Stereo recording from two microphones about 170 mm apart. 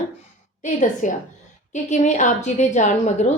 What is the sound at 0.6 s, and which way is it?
A woman's voice, 45° left (ahead or behind).